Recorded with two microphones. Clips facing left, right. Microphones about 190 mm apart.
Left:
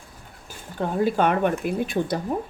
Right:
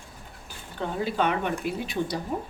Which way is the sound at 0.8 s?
50° left (ahead or behind).